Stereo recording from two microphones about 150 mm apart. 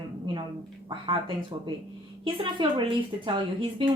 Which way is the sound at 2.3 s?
35° right (ahead or behind).